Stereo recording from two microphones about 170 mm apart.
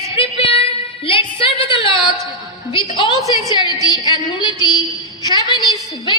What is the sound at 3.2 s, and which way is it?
A woman's voice, 25° left (ahead or behind).